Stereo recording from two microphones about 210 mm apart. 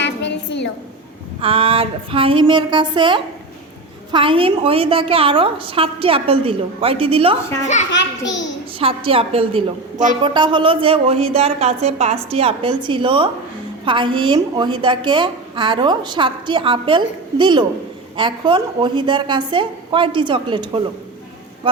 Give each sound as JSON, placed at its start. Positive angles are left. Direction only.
{"t": 0.0, "sound": "a sound", "side_deg": 55}
{"t": 1.4, "sound": "a woman's voice", "side_deg": -25}
{"t": 7.9, "sound": "a child's voice", "side_deg": 60}
{"t": 9.0, "sound": "a woman's voice", "side_deg": -25}